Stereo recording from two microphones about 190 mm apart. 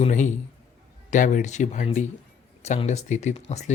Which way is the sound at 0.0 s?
40° left (ahead or behind).